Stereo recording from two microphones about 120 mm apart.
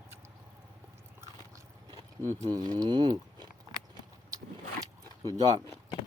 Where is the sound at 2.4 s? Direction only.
35° right (ahead or behind).